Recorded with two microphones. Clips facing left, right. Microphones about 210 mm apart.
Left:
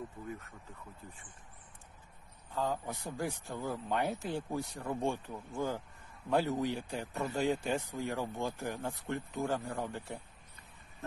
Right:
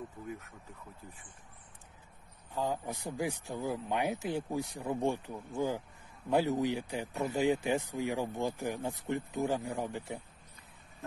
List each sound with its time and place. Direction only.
2.5 s speech: 15° right (ahead or behind)